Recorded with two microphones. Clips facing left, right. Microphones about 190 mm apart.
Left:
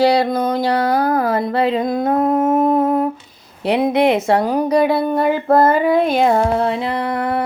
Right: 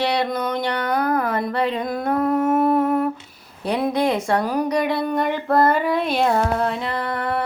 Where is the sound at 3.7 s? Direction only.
20° left (ahead or behind).